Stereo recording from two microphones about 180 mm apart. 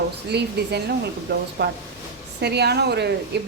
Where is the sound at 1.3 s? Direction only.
60° right (ahead or behind).